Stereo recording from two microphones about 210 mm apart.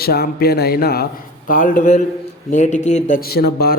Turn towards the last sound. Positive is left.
turn(degrees=50)  # may be behind; listen again after turning